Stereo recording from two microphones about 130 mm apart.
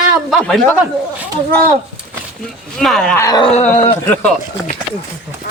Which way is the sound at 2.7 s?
5° left (ahead or behind).